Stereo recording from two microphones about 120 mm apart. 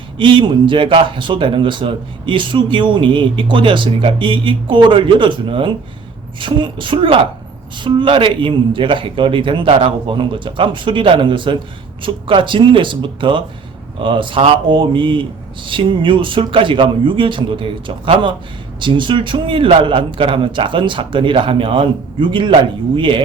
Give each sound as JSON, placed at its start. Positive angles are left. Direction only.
{"t": 0.2, "sound": "speech", "side_deg": -45}